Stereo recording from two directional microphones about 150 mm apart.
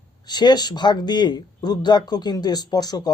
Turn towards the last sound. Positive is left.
turn(degrees=25)  # may be behind; listen again after turning